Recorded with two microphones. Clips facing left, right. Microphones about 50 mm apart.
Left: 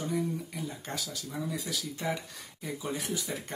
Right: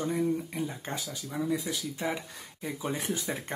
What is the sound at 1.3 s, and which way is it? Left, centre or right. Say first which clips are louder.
Speech: right 6 dB; centre.